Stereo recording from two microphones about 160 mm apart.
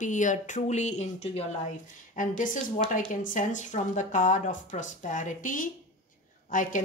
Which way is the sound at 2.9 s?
55° left (ahead or behind).